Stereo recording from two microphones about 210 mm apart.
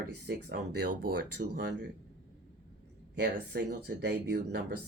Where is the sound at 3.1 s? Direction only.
45° right (ahead or behind).